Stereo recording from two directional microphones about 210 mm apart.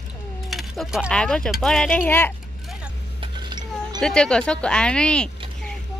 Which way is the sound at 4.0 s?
5° left (ahead or behind).